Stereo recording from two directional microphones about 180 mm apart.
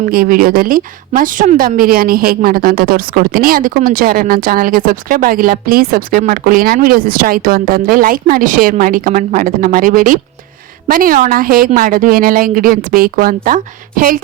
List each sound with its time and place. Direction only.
0.0 s a woman's voice: 55° right (ahead or behind)